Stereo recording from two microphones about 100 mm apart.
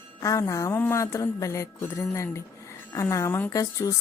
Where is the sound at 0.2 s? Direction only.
35° left (ahead or behind).